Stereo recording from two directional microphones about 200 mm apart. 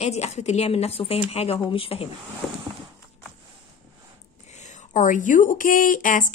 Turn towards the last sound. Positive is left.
turn(degrees=40)  # may be behind; listen again after turning